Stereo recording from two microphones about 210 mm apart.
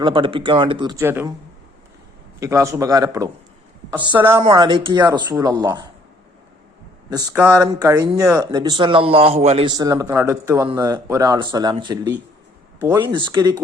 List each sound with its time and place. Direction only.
0.0 s a man's voice: 25° right (ahead or behind)
2.4 s speech: 15° right (ahead or behind)
4.4 s a man's voice: 25° right (ahead or behind)
7.1 s a man's voice: 20° right (ahead or behind)
12.8 s speech: 10° right (ahead or behind)
13.1 s a man's voice: 20° right (ahead or behind)